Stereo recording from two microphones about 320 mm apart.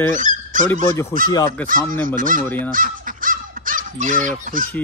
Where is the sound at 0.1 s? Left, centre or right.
Right.